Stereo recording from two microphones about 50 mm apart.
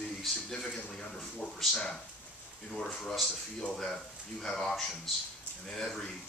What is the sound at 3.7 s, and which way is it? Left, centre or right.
Speech, centre.